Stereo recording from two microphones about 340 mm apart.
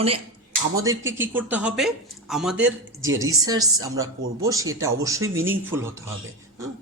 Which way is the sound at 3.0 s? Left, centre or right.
Right.